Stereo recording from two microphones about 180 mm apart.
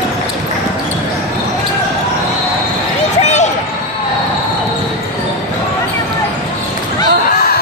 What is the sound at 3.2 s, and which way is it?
Run, 40° left (ahead or behind).